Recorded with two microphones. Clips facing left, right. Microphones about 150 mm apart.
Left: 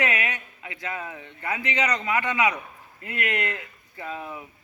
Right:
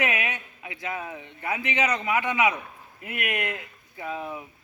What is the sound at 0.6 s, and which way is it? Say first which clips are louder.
A man's voice: right 1 dB; 15° right (ahead or behind).